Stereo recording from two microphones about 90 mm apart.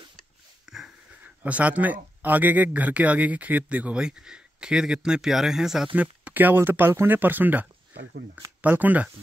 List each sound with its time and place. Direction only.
0.7 s wheeze: 5° right (ahead or behind)
1.2 s speech: 15° right (ahead or behind)
5.9 s speech: 20° right (ahead or behind)